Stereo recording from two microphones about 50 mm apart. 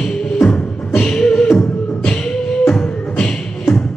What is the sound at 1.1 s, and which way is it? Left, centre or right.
Beatboxing, centre.